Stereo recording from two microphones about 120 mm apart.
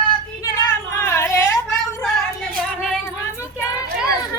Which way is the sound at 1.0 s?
20° left (ahead or behind).